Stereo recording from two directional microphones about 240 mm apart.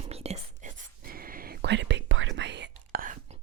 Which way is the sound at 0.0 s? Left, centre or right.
Right.